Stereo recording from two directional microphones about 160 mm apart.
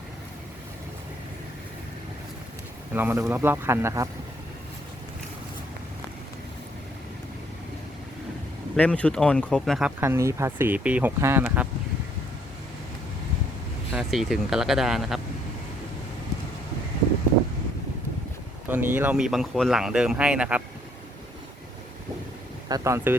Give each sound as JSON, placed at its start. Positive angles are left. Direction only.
{"t": 2.9, "sound": "speech", "side_deg": -15}
{"t": 8.7, "sound": "speech", "side_deg": 10}
{"t": 10.0, "sound": "speech", "side_deg": -15}
{"t": 13.9, "sound": "speech", "side_deg": 0}
{"t": 18.7, "sound": "speech", "side_deg": -10}
{"t": 22.7, "sound": "speech", "side_deg": -20}